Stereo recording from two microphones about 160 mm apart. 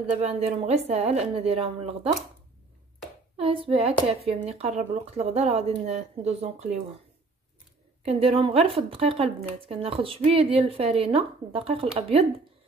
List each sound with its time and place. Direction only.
0.2 s speech: 40° right (ahead or behind)
3.3 s speech: 35° right (ahead or behind)
8.0 s speech: 40° right (ahead or behind)